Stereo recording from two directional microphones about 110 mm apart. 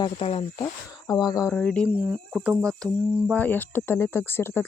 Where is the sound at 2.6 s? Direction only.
5° left (ahead or behind).